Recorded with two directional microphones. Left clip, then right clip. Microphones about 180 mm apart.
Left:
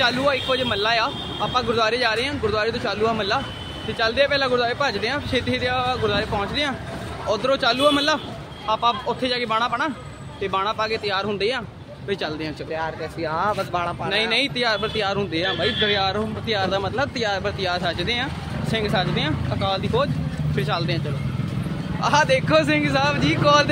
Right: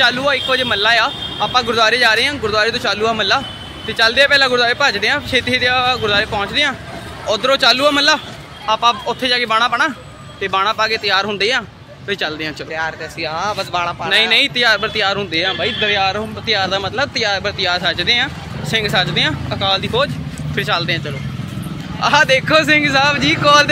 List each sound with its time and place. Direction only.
0.0 s speech: 5° right (ahead or behind)
12.7 s speech: 20° left (ahead or behind)
14.0 s speech: 5° right (ahead or behind)
22.0 s speech: 5° right (ahead or behind)